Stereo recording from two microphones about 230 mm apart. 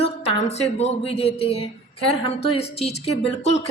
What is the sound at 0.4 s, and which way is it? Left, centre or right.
A woman's voice, left.